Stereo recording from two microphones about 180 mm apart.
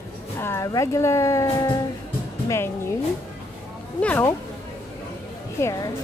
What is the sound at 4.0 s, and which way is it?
Speech, 10° left (ahead or behind).